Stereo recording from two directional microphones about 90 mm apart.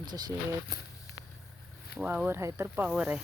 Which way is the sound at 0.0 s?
50° right (ahead or behind).